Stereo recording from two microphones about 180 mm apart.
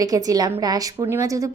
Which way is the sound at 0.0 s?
20° right (ahead or behind).